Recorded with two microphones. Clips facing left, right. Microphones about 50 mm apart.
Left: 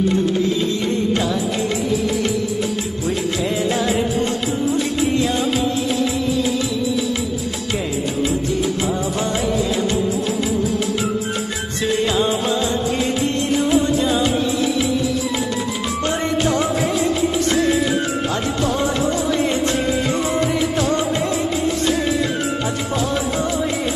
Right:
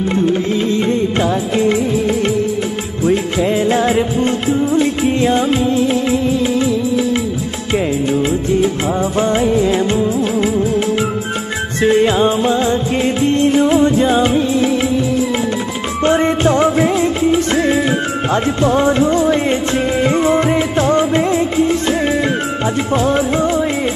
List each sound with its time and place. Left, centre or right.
0.3 s music: right